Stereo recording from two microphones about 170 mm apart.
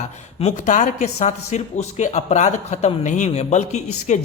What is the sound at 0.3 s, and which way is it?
A man's voice, 40° left (ahead or behind).